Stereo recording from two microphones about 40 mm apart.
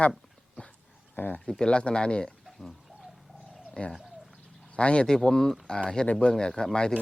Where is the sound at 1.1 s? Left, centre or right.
Left.